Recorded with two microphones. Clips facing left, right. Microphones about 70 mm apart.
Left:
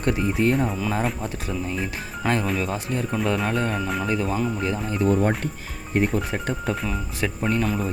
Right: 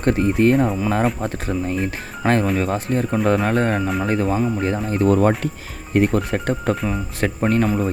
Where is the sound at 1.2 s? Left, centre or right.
Right.